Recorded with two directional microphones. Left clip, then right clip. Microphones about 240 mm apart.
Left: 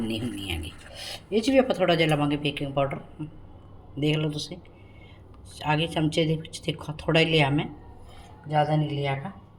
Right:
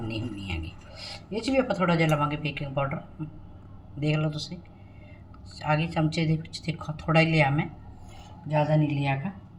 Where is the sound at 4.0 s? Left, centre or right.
Left.